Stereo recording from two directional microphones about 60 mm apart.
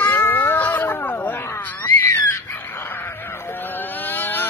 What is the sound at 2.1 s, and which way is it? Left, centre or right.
Screaming, left.